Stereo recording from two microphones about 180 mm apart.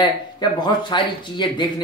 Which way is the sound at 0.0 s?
25° left (ahead or behind).